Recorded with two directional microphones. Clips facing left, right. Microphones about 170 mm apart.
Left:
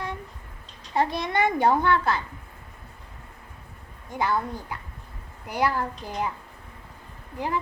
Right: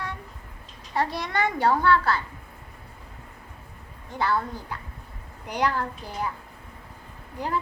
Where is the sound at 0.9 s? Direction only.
20° left (ahead or behind).